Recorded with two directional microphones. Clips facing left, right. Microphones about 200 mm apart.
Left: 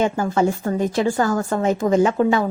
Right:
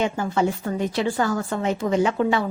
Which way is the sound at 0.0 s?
45° left (ahead or behind).